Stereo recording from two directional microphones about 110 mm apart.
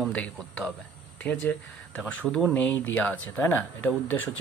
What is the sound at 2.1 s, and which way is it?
Speech, 10° left (ahead or behind).